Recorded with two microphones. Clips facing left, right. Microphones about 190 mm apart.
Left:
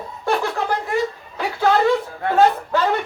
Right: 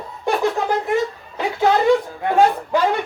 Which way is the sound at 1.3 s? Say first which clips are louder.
Right 1 dB; 15° right (ahead or behind).